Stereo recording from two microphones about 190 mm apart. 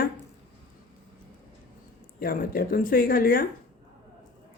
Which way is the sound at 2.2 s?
50° left (ahead or behind).